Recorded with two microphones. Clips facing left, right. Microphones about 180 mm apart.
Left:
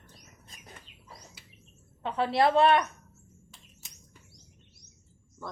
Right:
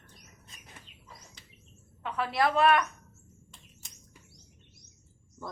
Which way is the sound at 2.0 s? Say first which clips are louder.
Left 3 dB; 30° left (ahead or behind).